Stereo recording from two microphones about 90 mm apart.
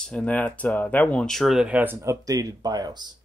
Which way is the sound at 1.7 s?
20° right (ahead or behind).